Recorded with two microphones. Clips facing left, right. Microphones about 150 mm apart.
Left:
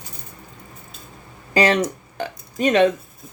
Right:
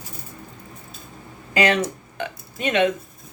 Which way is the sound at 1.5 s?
35° left (ahead or behind).